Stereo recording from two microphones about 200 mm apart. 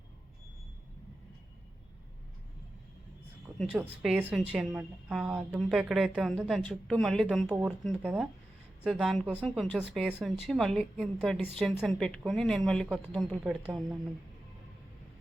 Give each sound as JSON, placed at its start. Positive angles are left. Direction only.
{"t": 3.6, "sound": "a woman's voice", "side_deg": -5}